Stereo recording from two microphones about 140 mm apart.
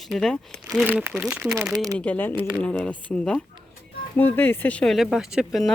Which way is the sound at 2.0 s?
10° left (ahead or behind).